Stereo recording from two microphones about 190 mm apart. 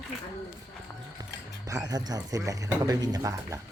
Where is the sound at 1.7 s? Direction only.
20° right (ahead or behind).